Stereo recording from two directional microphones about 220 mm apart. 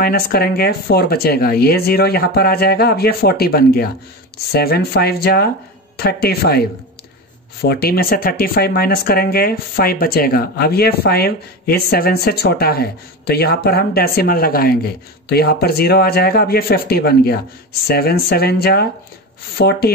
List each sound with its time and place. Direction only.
0.0 s speech: 45° left (ahead or behind)
7.6 s speech: 45° left (ahead or behind)